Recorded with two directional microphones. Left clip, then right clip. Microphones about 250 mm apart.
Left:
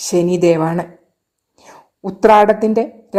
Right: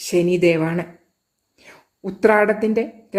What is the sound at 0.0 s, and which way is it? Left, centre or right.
A woman's voice, centre.